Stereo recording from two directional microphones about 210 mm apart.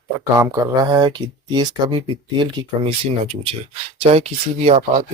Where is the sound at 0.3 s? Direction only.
15° right (ahead or behind).